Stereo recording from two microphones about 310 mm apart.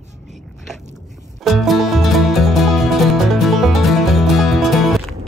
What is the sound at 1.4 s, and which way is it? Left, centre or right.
Music, centre.